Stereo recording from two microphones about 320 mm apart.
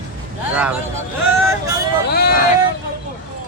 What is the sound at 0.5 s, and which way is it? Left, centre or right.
Speech, centre.